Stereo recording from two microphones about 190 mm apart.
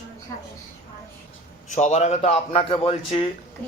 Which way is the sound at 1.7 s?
40° left (ahead or behind).